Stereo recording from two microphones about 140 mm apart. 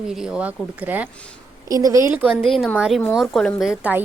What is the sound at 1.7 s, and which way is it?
Speech, 25° right (ahead or behind).